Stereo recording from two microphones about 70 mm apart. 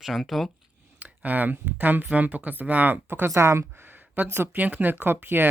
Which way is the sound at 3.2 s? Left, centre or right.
Right.